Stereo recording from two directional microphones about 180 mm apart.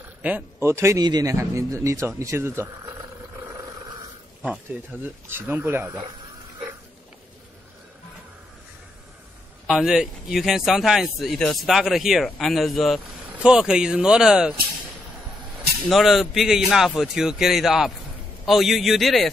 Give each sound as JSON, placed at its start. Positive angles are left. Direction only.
{"t": 0.2, "sound": "a man's voice", "side_deg": -10}
{"t": 5.0, "sound": "a man's voice", "side_deg": -10}
{"t": 9.7, "sound": "speech", "side_deg": -5}
{"t": 15.9, "sound": "speech", "side_deg": 0}